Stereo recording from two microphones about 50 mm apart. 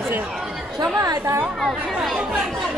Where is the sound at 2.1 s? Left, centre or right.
Centre.